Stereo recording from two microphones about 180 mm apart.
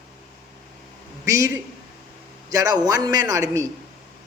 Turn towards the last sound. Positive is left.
turn(degrees=-20)  # may be behind; listen again after turning